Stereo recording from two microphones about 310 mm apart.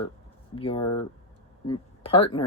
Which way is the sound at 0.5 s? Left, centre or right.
Centre.